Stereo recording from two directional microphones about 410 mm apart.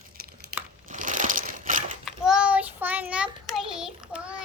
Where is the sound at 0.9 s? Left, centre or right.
Centre.